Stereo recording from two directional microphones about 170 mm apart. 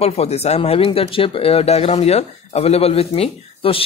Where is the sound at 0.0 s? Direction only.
40° left (ahead or behind).